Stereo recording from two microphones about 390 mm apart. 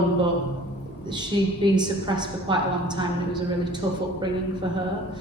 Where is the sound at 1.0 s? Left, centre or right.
Centre.